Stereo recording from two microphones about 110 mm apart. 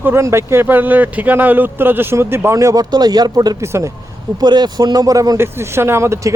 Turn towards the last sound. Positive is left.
turn(degrees=-25)  # may be behind; listen again after turning